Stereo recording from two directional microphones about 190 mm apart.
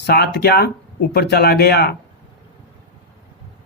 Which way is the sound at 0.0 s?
60° left (ahead or behind).